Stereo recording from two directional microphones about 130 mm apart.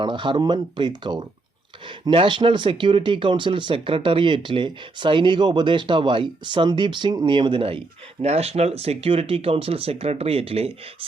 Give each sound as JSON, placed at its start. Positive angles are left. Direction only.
{"t": 0.0, "sound": "speech", "side_deg": -40}